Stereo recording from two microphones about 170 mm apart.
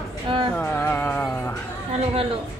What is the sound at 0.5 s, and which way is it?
Music, 10° left (ahead or behind).